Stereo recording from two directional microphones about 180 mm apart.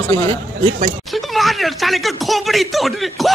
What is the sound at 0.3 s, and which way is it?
Speech, 40° right (ahead or behind).